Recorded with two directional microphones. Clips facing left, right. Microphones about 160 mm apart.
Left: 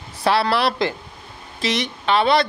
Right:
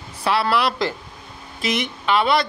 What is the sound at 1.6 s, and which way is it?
Speech, 30° left (ahead or behind).